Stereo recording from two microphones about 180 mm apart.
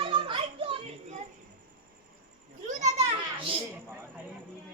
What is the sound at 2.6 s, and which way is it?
Children playing, 40° right (ahead or behind).